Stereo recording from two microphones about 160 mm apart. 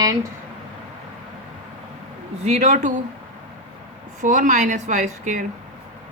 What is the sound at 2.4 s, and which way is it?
Speech, 45° right (ahead or behind).